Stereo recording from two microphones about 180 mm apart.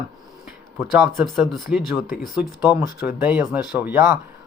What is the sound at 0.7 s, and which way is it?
Speech, centre (ahead or behind).